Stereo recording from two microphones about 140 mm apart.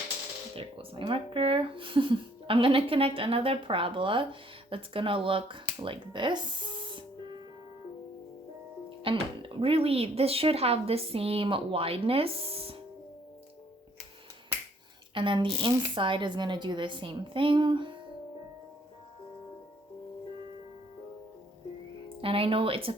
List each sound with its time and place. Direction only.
0.5 s speech: 40° right (ahead or behind)
5.8 s music: 35° right (ahead or behind)
9.0 s speech: 40° right (ahead or behind)
15.1 s a woman's voice: 35° right (ahead or behind)
22.2 s speech: 40° right (ahead or behind)